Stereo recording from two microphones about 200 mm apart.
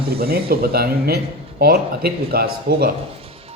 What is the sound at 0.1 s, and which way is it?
Speech, 50° right (ahead or behind).